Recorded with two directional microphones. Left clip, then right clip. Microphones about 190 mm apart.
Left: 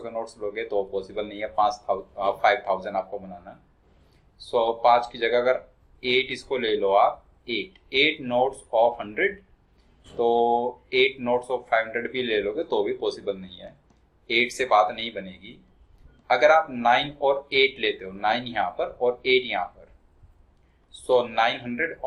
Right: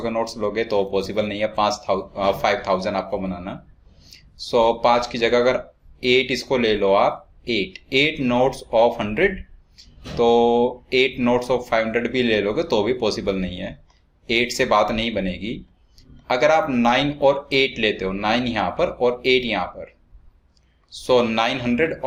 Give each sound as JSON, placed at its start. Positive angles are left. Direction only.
{"t": 0.0, "sound": "speech", "side_deg": -45}
{"t": 21.1, "sound": "speech", "side_deg": -45}